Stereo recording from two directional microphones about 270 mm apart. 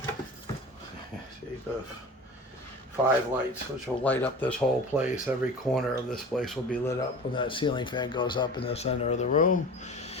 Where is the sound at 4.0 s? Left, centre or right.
Centre.